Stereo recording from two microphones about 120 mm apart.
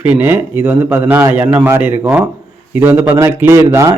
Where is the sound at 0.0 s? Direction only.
15° right (ahead or behind).